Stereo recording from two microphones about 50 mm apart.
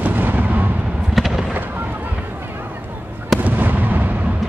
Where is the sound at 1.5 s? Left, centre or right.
Right.